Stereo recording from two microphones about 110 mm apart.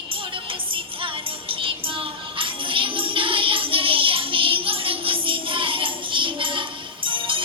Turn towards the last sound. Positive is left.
turn(degrees=-50)  # may be behind; listen again after turning